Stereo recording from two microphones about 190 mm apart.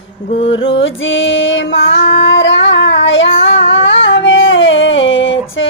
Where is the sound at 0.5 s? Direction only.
75° left (ahead or behind).